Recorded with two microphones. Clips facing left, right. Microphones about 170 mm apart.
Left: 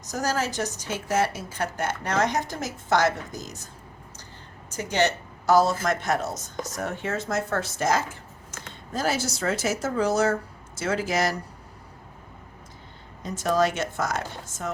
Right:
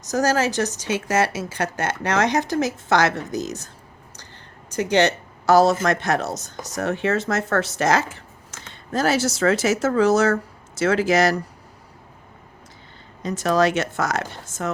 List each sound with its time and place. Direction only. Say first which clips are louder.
0.0 s speech: right 7 dB; 80° right
4.7 s speech: right 6 dB; 75° right (ahead or behind); by 11.3 s 90° right
13.2 s speech: right 4 dB; 90° right